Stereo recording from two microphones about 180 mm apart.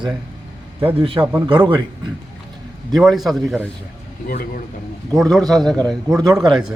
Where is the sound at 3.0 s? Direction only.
Centre (ahead or behind).